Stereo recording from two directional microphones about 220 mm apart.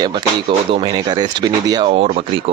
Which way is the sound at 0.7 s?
20° right (ahead or behind).